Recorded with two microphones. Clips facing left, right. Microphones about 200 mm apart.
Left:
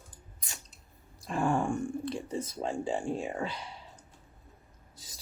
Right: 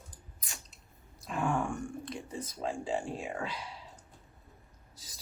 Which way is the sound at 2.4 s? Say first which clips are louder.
Left 3 dB; 25° left (ahead or behind).